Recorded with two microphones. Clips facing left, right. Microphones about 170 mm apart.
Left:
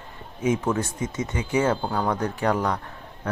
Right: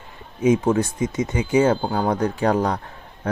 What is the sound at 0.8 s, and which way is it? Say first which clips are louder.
Speech: right 5 dB; 15° right (ahead or behind).